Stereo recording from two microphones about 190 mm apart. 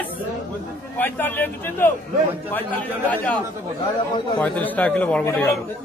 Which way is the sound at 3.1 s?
5° left (ahead or behind).